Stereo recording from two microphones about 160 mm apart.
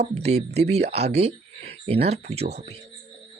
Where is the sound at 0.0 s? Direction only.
45° right (ahead or behind).